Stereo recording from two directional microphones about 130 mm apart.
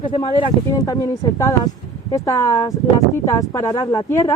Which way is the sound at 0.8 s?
25° left (ahead or behind).